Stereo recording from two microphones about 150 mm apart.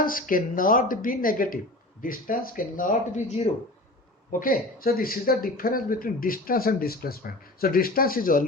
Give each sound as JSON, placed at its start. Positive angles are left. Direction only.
{"t": 0.0, "sound": "speech", "side_deg": 70}